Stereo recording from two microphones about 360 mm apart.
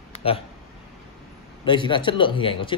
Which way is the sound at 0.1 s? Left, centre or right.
Centre.